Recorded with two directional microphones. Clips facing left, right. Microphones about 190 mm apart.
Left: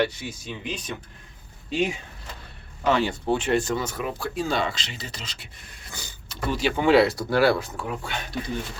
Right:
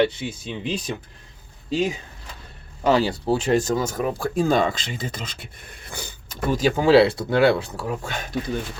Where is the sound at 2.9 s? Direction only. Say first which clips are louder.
Right 3 dB; 35° right (ahead or behind).